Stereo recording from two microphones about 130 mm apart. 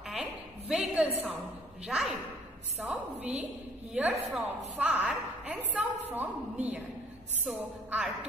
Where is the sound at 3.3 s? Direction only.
55° right (ahead or behind).